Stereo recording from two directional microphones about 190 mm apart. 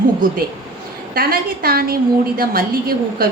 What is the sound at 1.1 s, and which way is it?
A woman's voice, 50° right (ahead or behind).